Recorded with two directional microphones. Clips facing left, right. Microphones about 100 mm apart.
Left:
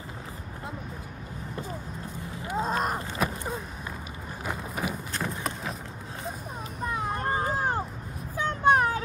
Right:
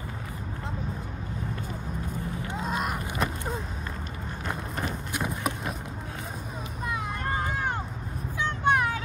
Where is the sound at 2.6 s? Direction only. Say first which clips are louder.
Left 3 dB; 40° left (ahead or behind).